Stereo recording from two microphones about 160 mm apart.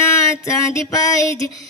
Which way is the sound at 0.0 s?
20° left (ahead or behind).